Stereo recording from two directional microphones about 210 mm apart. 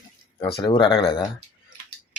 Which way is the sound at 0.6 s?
20° left (ahead or behind).